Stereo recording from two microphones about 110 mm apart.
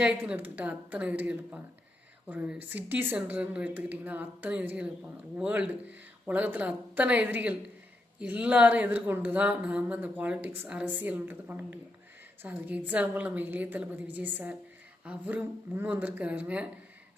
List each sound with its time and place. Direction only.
0.0 s speech: 15° right (ahead or behind)